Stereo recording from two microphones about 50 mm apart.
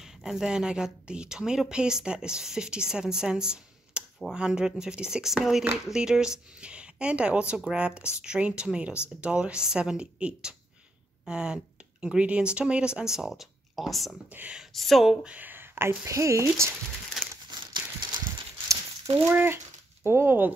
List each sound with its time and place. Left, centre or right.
0.0 s speech: centre
13.0 s speech: centre
14.4 s speech: right
14.7 s speech: centre
15.2 s a sound: right
16.1 s speech: right
19.2 s speech: right